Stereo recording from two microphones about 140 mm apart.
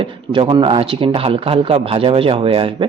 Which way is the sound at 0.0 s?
35° right (ahead or behind).